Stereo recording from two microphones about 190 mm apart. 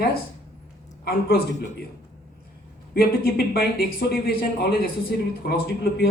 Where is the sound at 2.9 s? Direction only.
55° left (ahead or behind).